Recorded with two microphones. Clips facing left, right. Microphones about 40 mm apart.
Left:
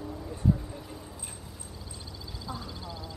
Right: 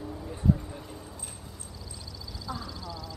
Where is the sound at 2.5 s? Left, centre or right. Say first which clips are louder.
Right 2 dB; left.